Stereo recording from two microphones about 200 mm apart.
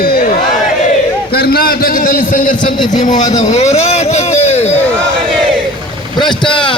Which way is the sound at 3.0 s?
40° left (ahead or behind).